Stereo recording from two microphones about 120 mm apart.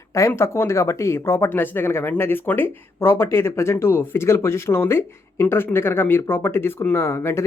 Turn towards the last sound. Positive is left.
turn(degrees=20)  # may be behind; listen again after turning